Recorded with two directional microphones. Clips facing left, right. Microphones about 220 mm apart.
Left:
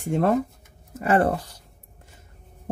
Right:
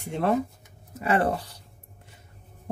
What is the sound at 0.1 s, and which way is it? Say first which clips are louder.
Speech: left 3 dB; 45° left (ahead or behind).